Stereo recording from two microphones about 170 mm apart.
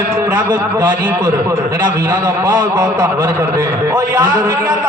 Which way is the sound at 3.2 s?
20° right (ahead or behind).